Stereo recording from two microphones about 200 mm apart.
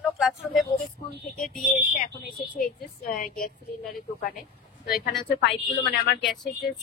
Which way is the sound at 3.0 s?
45° left (ahead or behind).